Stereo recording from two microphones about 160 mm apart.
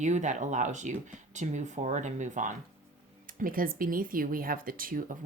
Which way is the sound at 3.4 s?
60° right (ahead or behind).